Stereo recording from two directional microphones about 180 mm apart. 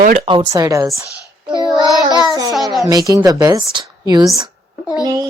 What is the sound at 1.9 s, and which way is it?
Speech, 20° left (ahead or behind).